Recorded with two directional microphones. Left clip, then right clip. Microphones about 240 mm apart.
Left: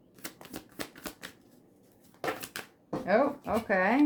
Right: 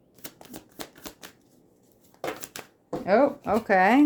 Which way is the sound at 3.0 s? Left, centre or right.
Right.